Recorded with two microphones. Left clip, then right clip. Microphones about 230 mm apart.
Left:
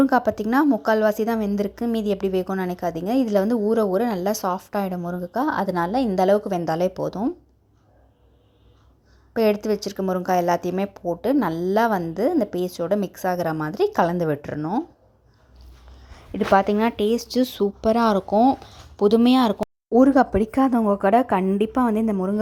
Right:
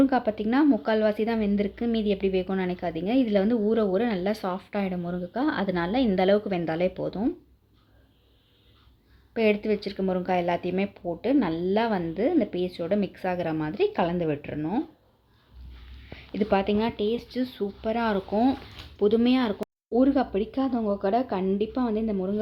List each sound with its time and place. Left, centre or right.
0.0 s a woman's voice: centre
9.3 s a woman's voice: centre
16.3 s a woman's voice: centre